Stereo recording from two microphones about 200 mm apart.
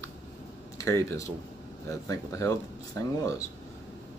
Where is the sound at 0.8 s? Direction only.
15° left (ahead or behind).